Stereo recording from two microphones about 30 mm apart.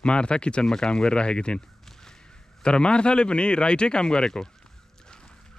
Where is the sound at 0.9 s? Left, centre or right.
Left.